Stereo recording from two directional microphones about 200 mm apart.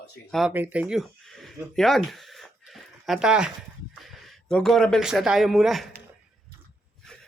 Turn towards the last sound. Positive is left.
turn(degrees=0)  # may be behind; listen again after turning